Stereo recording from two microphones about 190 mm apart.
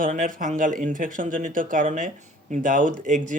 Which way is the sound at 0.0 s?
45° right (ahead or behind).